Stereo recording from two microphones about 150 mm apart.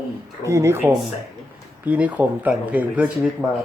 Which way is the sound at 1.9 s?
10° right (ahead or behind).